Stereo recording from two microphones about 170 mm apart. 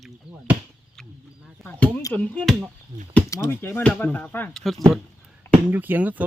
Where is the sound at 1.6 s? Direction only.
10° left (ahead or behind).